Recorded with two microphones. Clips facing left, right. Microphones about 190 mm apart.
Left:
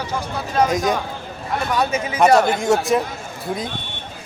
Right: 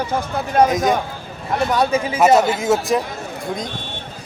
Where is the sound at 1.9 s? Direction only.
30° right (ahead or behind).